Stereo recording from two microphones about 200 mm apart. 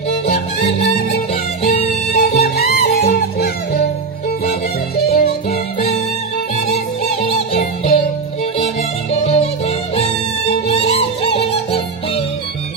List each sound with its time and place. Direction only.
0.7 s music: 30° left (ahead or behind)
1.3 s music: 45° left (ahead or behind)
1.8 s music: 35° left (ahead or behind)
2.4 s music: 50° left (ahead or behind)
4.9 s music: 50° left (ahead or behind)
6.3 s music: 35° left (ahead or behind)
7.6 s music: 45° left (ahead or behind)
9.2 s music: 35° left (ahead or behind)